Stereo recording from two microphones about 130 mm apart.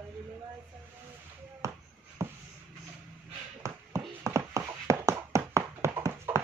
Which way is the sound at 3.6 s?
25° right (ahead or behind).